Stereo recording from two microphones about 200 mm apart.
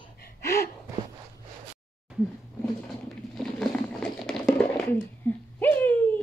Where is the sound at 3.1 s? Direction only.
Centre (ahead or behind).